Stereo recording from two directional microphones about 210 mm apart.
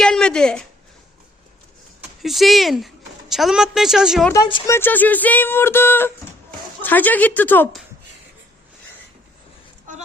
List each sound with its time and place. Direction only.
0.0 s a sound: 5° left (ahead or behind)
2.2 s a woman's voice: centre (ahead or behind)
4.3 s speech: 20° left (ahead or behind)
4.7 s speech: 10° left (ahead or behind)